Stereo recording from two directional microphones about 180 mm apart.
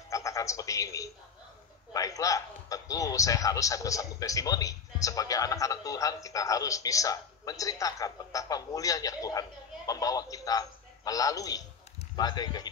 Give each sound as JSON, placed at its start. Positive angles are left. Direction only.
{"t": 0.1, "sound": "a man's voice", "side_deg": 15}